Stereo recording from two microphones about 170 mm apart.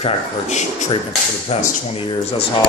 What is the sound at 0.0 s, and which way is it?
Speech, 45° left (ahead or behind).